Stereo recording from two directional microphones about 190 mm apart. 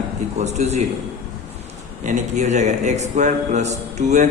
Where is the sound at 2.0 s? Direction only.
40° right (ahead or behind).